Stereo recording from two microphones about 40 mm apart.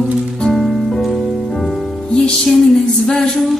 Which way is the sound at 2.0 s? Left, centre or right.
Centre.